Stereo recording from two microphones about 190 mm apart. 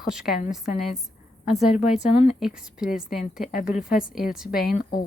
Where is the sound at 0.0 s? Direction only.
5° right (ahead or behind).